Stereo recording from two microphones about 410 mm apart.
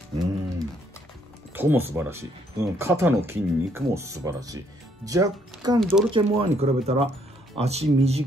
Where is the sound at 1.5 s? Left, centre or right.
Centre.